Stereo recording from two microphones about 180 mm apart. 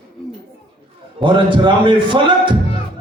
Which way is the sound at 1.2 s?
25° right (ahead or behind).